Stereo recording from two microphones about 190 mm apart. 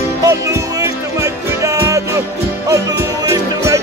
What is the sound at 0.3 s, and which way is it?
Music, 15° right (ahead or behind).